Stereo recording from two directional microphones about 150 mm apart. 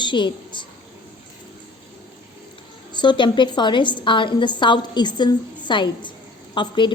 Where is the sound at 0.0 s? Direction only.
30° left (ahead or behind).